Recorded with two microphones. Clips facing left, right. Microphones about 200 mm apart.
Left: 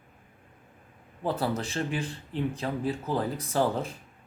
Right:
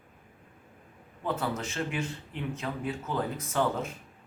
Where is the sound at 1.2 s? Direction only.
35° left (ahead or behind).